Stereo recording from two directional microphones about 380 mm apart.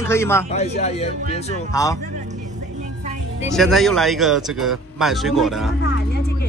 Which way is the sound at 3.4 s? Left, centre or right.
Centre.